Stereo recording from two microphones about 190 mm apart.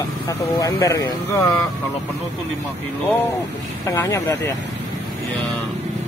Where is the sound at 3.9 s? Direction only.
15° left (ahead or behind).